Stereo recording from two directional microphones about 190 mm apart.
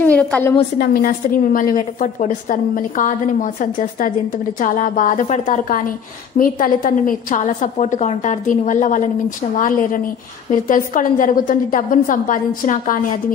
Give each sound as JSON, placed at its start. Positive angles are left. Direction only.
{"t": 0.0, "sound": "a woman's voice", "side_deg": 5}
{"t": 0.7, "sound": "a woman's voice", "side_deg": 50}